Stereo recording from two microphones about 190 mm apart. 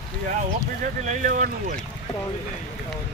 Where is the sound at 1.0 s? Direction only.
45° right (ahead or behind).